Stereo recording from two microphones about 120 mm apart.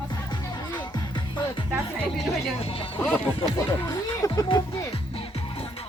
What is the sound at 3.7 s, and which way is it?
Speech, 30° left (ahead or behind).